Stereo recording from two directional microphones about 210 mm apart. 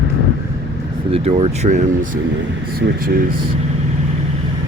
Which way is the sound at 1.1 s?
30° right (ahead or behind).